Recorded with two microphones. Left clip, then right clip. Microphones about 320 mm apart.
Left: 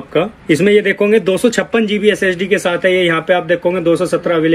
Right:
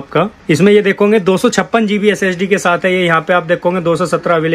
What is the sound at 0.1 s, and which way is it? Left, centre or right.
A man's voice, right.